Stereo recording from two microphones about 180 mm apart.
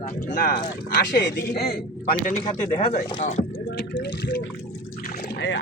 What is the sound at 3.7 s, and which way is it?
Speech, 80° left.